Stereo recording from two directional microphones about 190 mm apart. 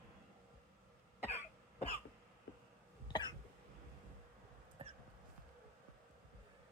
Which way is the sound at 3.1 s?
25° left (ahead or behind).